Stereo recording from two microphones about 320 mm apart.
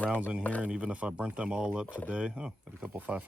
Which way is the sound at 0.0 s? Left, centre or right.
Centre.